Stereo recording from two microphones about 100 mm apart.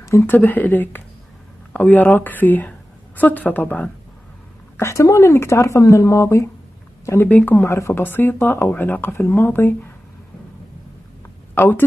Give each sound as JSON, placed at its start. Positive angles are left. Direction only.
{"t": 0.3, "sound": "speech", "side_deg": 15}
{"t": 4.7, "sound": "speech", "side_deg": 30}
{"t": 7.1, "sound": "speech", "side_deg": 20}
{"t": 11.5, "sound": "speech", "side_deg": 20}